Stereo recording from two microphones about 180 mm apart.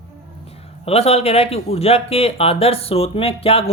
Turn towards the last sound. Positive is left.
turn(degrees=35)  # may be behind; listen again after turning